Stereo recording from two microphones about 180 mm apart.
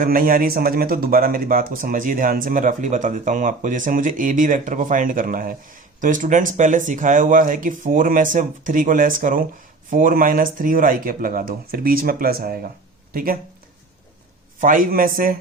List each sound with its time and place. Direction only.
0.0 s a man's voice: 50° right (ahead or behind)
14.6 s a man's voice: 50° right (ahead or behind)